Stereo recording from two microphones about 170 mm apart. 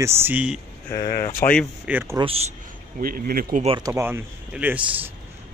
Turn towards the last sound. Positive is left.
turn(degrees=-10)  # may be behind; listen again after turning